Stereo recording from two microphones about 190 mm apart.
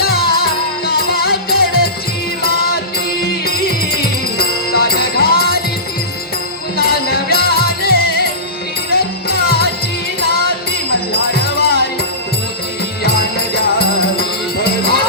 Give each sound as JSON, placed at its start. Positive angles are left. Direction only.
{"t": 0.0, "sound": "music", "side_deg": 55}
{"t": 6.7, "sound": "music", "side_deg": 55}
{"t": 13.0, "sound": "music", "side_deg": 55}